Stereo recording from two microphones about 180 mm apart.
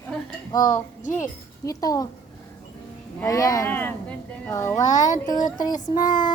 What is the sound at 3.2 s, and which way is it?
A woman's voice, 20° left (ahead or behind).